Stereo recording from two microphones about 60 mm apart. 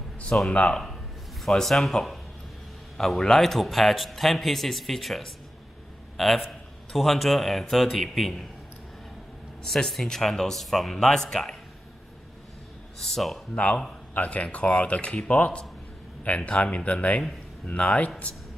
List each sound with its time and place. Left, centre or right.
0.5 s speech: centre
1.4 s a man's voice: centre
9.7 s speech: centre
13.0 s a man's voice: centre
14.1 s speech: left